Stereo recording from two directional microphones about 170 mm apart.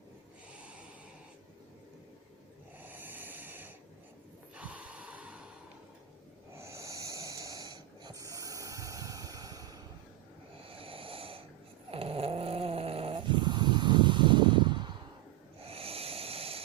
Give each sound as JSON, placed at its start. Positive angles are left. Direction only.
{"t": 0.5, "sound": "snort", "side_deg": -5}
{"t": 2.8, "sound": "sanding", "side_deg": -10}
{"t": 4.5, "sound": "snort", "side_deg": -5}
{"t": 6.5, "sound": "snoring", "side_deg": -15}
{"t": 10.6, "sound": "snoring", "side_deg": -30}
{"t": 15.6, "sound": "a sound", "side_deg": -35}